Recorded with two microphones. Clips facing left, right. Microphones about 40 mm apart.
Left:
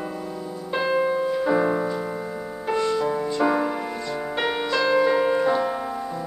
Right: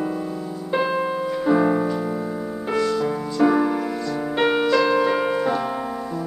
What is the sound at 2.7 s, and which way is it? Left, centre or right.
Music, left.